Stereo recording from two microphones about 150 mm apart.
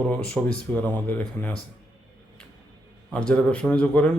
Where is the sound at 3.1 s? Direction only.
5° left (ahead or behind).